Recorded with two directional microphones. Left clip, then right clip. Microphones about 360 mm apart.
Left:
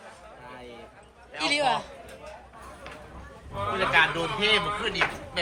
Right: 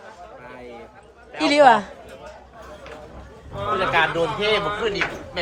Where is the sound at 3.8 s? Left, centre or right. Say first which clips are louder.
Right 3 dB; right.